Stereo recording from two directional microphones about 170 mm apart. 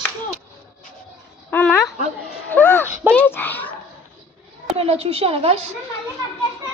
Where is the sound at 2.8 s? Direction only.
15° right (ahead or behind).